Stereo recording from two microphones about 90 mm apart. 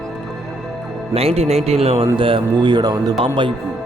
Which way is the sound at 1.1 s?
90° right.